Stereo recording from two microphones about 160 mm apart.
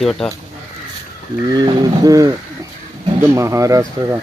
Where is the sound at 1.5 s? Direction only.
25° right (ahead or behind).